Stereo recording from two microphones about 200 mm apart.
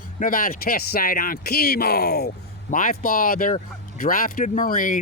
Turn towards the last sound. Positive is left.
turn(degrees=45)  # may be behind; listen again after turning